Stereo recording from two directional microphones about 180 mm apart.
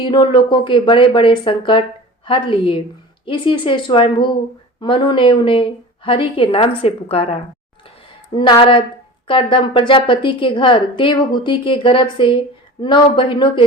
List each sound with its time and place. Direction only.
0.0 s a woman's voice: 25° left (ahead or behind)